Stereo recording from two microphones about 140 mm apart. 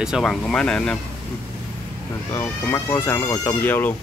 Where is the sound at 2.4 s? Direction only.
20° left (ahead or behind).